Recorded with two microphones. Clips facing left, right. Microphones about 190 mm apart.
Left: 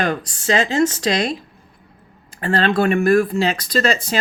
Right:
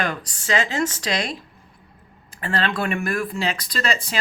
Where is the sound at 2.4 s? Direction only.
30° left (ahead or behind).